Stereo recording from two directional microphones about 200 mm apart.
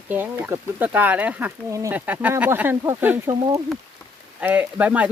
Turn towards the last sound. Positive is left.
turn(degrees=-5)  # may be behind; listen again after turning